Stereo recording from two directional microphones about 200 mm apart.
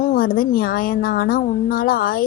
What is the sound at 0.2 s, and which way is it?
Speech, 50° left (ahead or behind).